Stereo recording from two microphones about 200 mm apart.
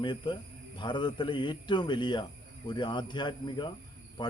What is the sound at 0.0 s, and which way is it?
Speech, 25° left (ahead or behind).